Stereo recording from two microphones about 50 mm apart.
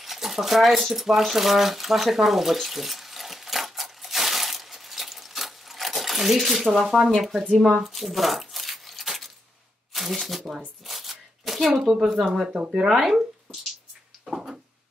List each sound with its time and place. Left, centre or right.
0.0 s a sound: centre
6.7 s speech: centre
7.8 s tearing: centre
9.9 s speech: centre
10.9 s shuffling cards: centre
12.5 s speech: centre
12.8 s speech: centre
14.2 s a sound: centre